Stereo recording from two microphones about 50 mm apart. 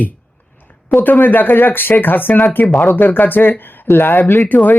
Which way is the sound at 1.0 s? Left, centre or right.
Left.